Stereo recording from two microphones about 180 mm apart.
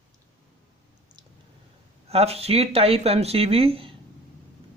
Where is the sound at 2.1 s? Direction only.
35° right (ahead or behind).